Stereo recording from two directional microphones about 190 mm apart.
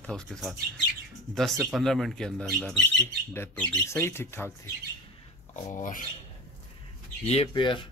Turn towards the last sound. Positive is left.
turn(degrees=25)  # may be behind; listen again after turning